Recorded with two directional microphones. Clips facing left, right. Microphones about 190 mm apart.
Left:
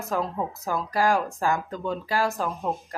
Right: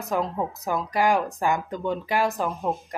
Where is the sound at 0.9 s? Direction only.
20° right (ahead or behind).